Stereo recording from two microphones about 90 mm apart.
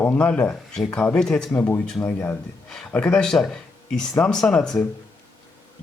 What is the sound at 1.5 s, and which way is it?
Speech, 20° left (ahead or behind).